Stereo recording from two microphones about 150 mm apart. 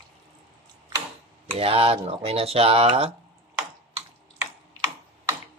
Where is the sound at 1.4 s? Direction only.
40° right (ahead or behind).